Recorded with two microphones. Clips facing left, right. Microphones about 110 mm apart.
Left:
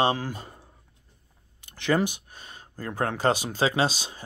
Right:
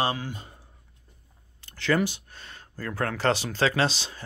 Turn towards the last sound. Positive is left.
turn(degrees=15)  # may be behind; listen again after turning